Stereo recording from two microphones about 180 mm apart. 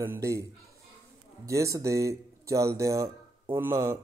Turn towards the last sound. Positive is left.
turn(degrees=-15)  # may be behind; listen again after turning